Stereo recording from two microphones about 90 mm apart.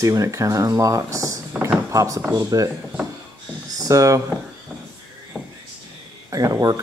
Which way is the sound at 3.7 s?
40° right (ahead or behind).